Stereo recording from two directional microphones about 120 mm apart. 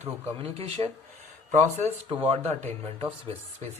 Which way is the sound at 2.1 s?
55° right (ahead or behind).